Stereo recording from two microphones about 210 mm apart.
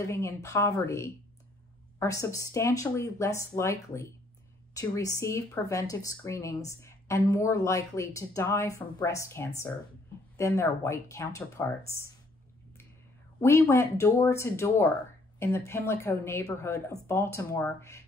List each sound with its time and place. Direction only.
0.0 s a woman's voice: 15° left (ahead or behind)
13.4 s a woman's voice: 10° left (ahead or behind)